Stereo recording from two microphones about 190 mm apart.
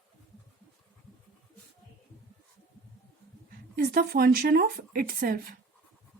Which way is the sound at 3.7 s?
50° right (ahead or behind).